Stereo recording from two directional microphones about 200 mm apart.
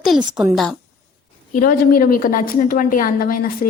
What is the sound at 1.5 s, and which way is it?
A woman's voice, 45° left (ahead or behind).